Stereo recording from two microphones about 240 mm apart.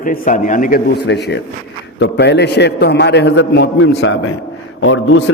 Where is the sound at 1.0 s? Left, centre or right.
Left.